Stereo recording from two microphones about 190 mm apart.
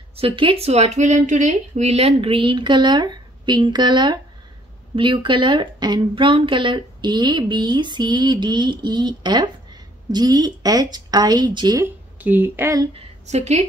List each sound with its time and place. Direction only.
0.1 s speech: 30° right (ahead or behind); by 12.8 s 15° right (ahead or behind)
12.9 s a woman's voice: 35° right (ahead or behind)